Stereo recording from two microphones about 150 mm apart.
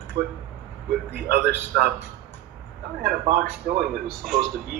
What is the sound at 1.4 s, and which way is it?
Speech, 10° right (ahead or behind).